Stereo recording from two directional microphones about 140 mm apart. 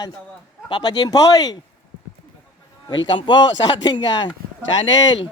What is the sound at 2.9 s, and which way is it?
A man's voice, 30° left (ahead or behind).